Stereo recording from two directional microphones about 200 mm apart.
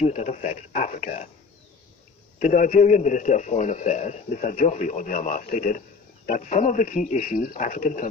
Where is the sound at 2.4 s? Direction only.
40° left (ahead or behind).